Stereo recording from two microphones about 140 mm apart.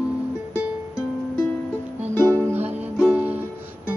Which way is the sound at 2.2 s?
15° right (ahead or behind).